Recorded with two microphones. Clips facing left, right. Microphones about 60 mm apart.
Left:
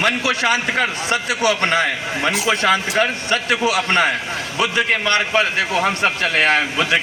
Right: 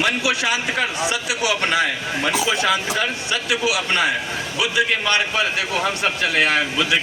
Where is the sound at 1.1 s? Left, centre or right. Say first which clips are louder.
Left 4 dB; left.